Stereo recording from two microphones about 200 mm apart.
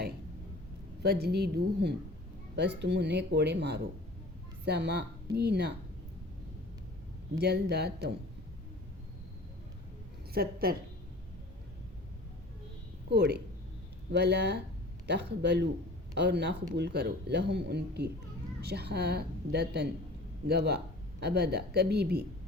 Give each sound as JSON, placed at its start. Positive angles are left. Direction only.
{"t": 1.0, "sound": "a woman's voice", "side_deg": -55}
{"t": 7.3, "sound": "speech", "side_deg": -55}
{"t": 10.3, "sound": "a woman's voice", "side_deg": -50}
{"t": 13.1, "sound": "speech", "side_deg": -55}